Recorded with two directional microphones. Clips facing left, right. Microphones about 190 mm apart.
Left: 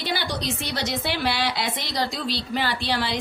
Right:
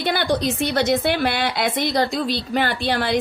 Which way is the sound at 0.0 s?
55° right (ahead or behind).